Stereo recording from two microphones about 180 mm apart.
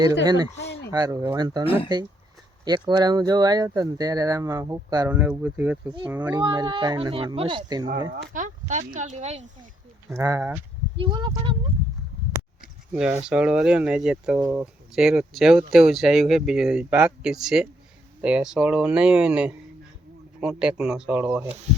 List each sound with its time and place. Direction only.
0.9 s speech: 20° right (ahead or behind)
1.6 s speech: 30° left (ahead or behind)
2.6 s speech: 25° right (ahead or behind)
5.0 s speech: 10° right (ahead or behind)
6.4 s speech: 25° right (ahead or behind)
8.1 s speech: 50° right (ahead or behind)
10.2 s speech: 15° right (ahead or behind)
10.9 s speech: 25° right (ahead or behind)
12.9 s speech: 5° right (ahead or behind)